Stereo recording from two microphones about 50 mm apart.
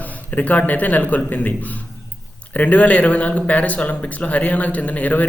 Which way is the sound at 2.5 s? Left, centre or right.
Left.